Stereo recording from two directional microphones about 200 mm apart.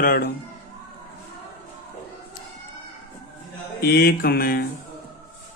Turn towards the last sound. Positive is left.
turn(degrees=50)  # may be behind; listen again after turning